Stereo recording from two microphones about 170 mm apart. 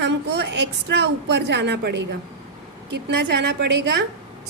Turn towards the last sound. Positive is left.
turn(degrees=-90)